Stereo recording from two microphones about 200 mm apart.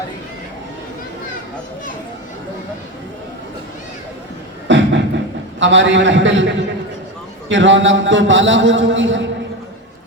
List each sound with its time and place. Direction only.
4.7 s a man's voice: 65° right (ahead or behind)